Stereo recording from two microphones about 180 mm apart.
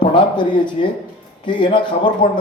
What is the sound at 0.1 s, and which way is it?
Speech, 25° left (ahead or behind).